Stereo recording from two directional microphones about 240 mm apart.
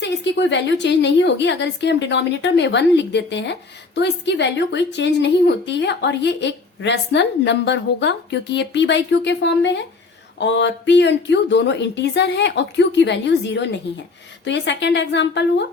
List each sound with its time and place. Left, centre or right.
0.0 s a woman's voice: left